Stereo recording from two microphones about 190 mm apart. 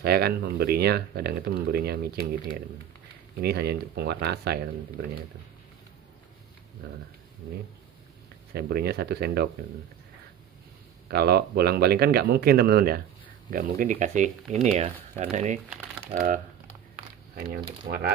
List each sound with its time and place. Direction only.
0.0 s speech: 55° right (ahead or behind)
3.3 s speech: 55° right (ahead or behind)
8.5 s speech: 55° right (ahead or behind)
11.1 s speech: 55° right (ahead or behind)
13.5 s speech: 40° right (ahead or behind)
17.8 s speech: 55° right (ahead or behind)